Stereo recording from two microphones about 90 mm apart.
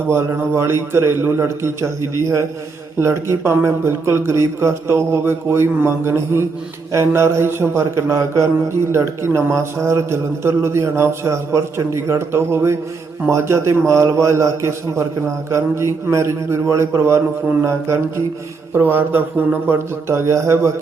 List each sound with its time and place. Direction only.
0.1 s speech: 30° right (ahead or behind)
3.0 s a man's voice: 30° right (ahead or behind)